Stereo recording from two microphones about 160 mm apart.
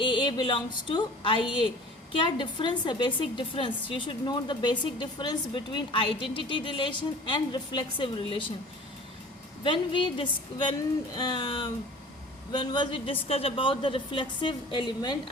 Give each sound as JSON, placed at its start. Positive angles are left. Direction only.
{"t": 0.0, "sound": "a sound", "side_deg": 30}
{"t": 2.2, "sound": "a woman's voice", "side_deg": 30}
{"t": 9.6, "sound": "a woman's voice", "side_deg": 30}